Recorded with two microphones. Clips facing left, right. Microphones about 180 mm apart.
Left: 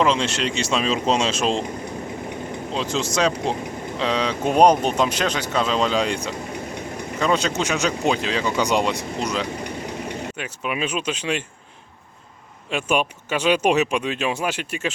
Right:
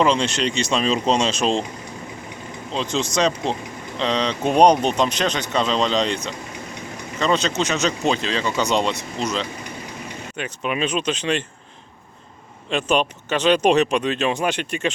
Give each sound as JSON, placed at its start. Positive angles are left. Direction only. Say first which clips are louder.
{"t": 0.0, "sound": "speech", "louder": "right 1 dB", "side_deg": 0}
{"t": 2.7, "sound": "speech", "louder": "right 1 dB", "side_deg": 5}
{"t": 12.7, "sound": "speech", "louder": "right 2 dB", "side_deg": 10}